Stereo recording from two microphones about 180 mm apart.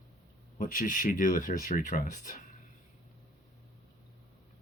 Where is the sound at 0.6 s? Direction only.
50° left (ahead or behind).